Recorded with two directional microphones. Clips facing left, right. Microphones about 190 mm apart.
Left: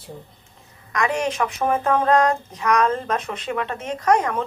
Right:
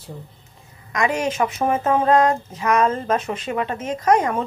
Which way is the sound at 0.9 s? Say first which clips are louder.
Right 1 dB; 10° right (ahead or behind).